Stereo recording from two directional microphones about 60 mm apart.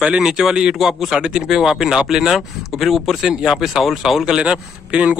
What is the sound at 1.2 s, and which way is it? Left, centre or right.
Speech, centre.